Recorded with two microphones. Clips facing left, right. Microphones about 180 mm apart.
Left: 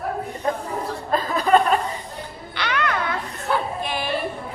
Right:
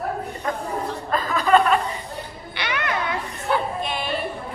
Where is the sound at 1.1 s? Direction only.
35° left (ahead or behind).